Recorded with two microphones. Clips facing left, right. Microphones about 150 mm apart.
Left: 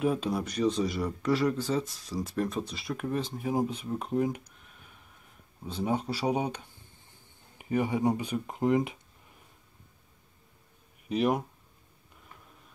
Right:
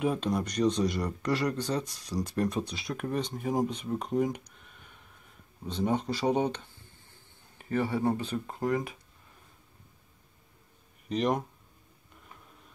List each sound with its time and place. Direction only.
0.0 s speech: 5° left (ahead or behind); by 9.0 s 20° left (ahead or behind)
11.1 s speech: 5° left (ahead or behind)